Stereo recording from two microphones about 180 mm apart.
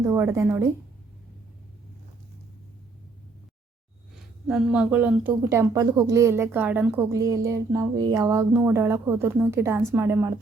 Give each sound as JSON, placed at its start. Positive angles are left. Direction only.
{"t": 0.0, "sound": "speech", "side_deg": -15}
{"t": 4.4, "sound": "speech", "side_deg": -5}